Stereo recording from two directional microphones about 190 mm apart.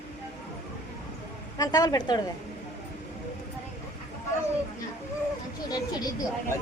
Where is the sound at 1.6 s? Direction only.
20° left (ahead or behind).